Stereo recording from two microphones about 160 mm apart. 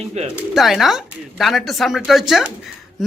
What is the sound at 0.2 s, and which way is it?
Speech, 45° right (ahead or behind).